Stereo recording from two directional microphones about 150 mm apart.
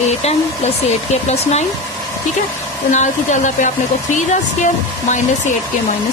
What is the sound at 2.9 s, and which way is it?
Speech, 55° left (ahead or behind).